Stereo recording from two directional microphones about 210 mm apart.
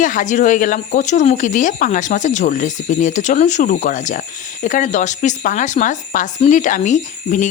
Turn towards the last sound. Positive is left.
turn(degrees=35)  # may be behind; listen again after turning